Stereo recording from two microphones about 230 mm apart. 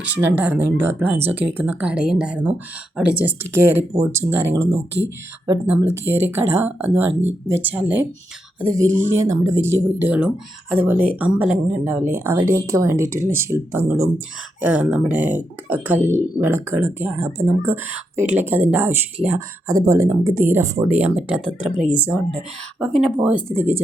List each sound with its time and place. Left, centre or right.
0.2 s speech: centre
5.8 s speech: centre
8.9 s speech: right
9.1 s speech: centre